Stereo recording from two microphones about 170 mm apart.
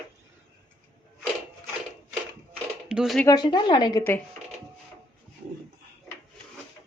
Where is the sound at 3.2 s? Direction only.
25° left (ahead or behind).